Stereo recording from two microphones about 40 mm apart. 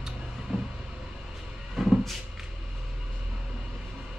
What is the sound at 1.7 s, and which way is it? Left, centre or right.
Cupboard open or close, centre.